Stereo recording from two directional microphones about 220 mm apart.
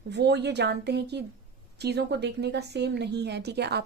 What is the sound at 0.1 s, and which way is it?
Speech, 50° right (ahead or behind).